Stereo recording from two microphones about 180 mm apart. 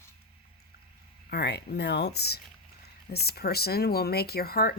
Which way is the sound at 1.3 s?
65° left (ahead or behind).